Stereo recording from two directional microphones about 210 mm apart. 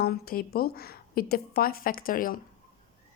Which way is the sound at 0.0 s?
45° left (ahead or behind).